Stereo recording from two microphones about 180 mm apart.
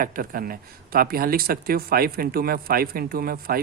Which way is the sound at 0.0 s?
50° right (ahead or behind).